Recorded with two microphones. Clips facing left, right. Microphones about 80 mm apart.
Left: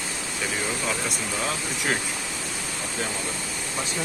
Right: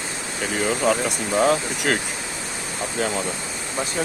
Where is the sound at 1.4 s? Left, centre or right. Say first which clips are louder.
Right 13 dB; right.